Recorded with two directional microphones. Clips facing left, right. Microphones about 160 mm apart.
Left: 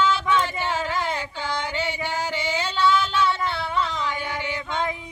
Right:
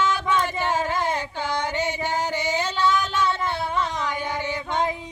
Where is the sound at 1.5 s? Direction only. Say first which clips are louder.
Right 2 dB; 45° right (ahead or behind).